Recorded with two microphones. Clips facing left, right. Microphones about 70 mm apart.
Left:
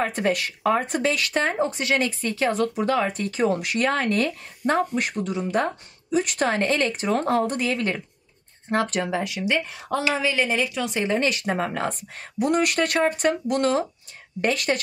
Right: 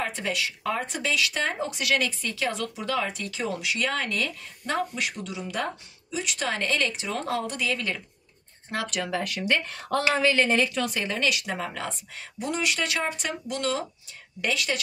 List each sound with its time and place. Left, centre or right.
0.0 s speech: left
9.1 s speech: centre
10.9 s speech: left
11.2 s speech: left